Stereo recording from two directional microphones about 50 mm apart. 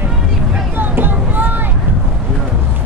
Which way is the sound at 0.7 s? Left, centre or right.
Right.